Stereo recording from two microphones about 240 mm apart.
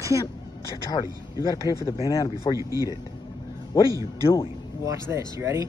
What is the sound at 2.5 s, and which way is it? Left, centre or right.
Speech, centre.